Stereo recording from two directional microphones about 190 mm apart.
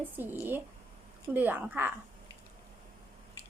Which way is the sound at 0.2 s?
10° right (ahead or behind).